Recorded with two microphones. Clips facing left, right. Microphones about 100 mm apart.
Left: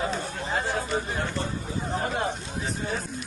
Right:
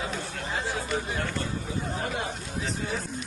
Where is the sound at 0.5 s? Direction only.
50° left (ahead or behind).